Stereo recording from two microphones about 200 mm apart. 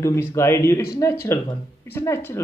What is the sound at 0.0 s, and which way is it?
Speech, 15° left (ahead or behind).